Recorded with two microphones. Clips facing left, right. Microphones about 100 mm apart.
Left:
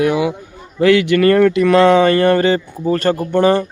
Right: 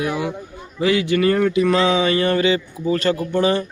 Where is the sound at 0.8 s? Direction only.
70° left (ahead or behind).